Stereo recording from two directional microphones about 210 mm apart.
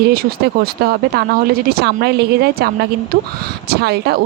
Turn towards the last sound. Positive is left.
turn(degrees=-50)  # may be behind; listen again after turning